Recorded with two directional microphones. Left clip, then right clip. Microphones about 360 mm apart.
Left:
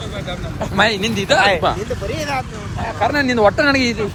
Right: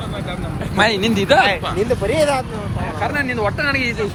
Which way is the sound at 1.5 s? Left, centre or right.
Left.